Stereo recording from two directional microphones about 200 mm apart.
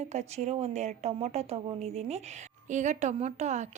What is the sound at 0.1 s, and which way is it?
Speech, 35° right (ahead or behind).